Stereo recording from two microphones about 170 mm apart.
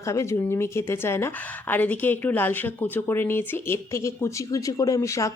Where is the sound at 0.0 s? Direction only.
15° left (ahead or behind).